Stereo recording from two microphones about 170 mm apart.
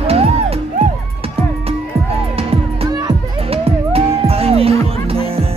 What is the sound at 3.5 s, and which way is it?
Music, 35° right (ahead or behind).